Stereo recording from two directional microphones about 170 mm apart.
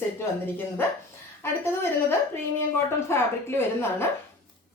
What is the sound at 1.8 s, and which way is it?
Speech, 15° left (ahead or behind).